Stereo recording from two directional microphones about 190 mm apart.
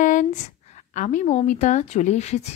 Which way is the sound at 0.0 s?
40° left (ahead or behind).